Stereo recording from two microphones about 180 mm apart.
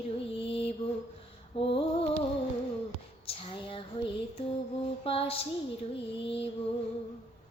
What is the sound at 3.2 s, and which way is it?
Female singing, 30° left (ahead or behind).